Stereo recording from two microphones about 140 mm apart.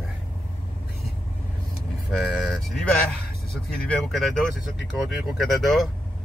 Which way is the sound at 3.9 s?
Centre (ahead or behind).